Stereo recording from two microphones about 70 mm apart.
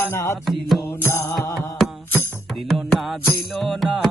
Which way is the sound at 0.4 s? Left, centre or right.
Centre.